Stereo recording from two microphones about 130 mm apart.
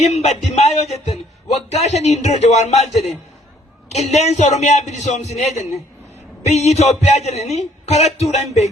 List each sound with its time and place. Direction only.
0.1 s a man's voice: 55° left (ahead or behind)